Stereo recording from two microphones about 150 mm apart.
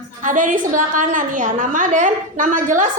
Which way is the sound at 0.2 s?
60° right (ahead or behind).